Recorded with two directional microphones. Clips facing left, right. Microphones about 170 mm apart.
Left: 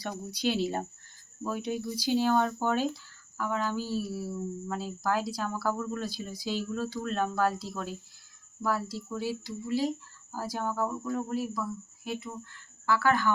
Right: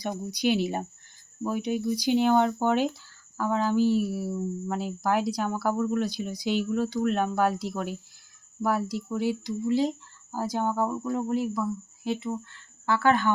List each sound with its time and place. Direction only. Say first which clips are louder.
0.0 s speech: right 4 dB; 15° right (ahead or behind)
3.3 s speech: right 6 dB; 30° right (ahead or behind)